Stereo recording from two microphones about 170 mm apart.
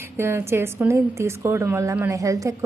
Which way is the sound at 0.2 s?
15° right (ahead or behind).